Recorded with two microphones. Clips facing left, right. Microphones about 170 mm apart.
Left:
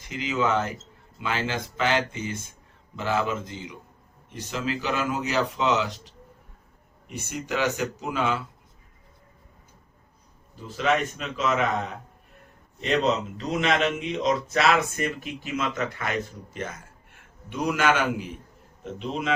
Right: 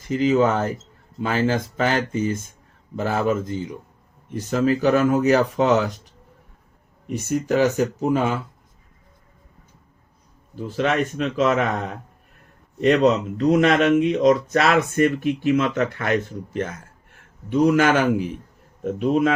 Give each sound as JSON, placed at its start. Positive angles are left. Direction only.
{"t": 0.1, "sound": "speech", "side_deg": -45}
{"t": 7.3, "sound": "speech", "side_deg": -45}
{"t": 10.8, "sound": "speech", "side_deg": -45}
{"t": 13.3, "sound": "speech", "side_deg": -50}